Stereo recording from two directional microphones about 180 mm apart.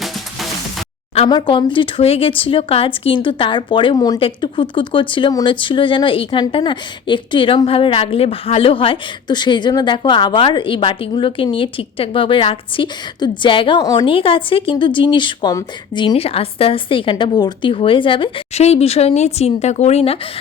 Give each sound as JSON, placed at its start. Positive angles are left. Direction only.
{"t": 1.1, "sound": "speech", "side_deg": 30}